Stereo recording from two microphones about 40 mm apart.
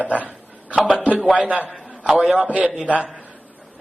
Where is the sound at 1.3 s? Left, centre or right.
Right.